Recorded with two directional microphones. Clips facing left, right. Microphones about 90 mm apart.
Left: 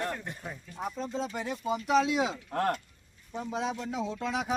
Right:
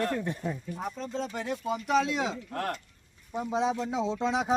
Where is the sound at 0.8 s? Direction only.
5° left (ahead or behind).